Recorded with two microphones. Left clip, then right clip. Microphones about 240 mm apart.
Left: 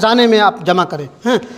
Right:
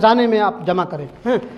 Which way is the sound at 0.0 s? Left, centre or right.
Left.